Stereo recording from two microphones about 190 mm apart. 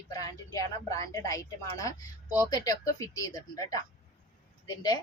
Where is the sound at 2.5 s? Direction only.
20° left (ahead or behind).